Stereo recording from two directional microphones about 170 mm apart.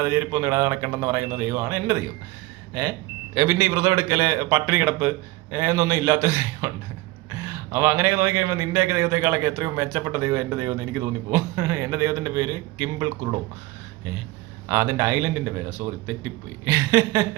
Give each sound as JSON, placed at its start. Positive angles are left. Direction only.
{"t": 0.0, "sound": "a man's voice", "side_deg": -15}
{"t": 3.3, "sound": "a man's voice", "side_deg": -20}
{"t": 7.7, "sound": "a man's voice", "side_deg": -15}
{"t": 14.7, "sound": "a man's voice", "side_deg": -20}
{"t": 16.6, "sound": "a sound", "side_deg": -15}